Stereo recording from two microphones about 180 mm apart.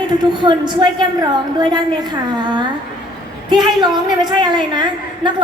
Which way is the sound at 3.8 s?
25° right (ahead or behind).